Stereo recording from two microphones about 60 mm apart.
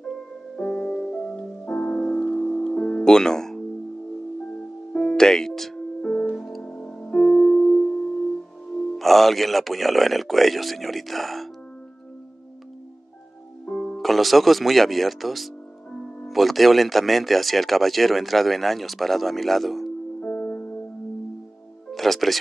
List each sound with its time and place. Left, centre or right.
0.6 s music: centre
1.3 s music: left
4.9 s music: centre
6.6 s music: centre
8.9 s speech: centre
13.7 s music: left
13.9 s speech: centre
20.2 s music: left
21.9 s speech: centre